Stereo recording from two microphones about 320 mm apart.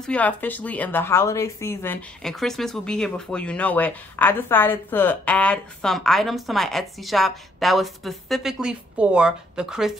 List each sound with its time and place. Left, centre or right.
0.0 s a woman's voice: centre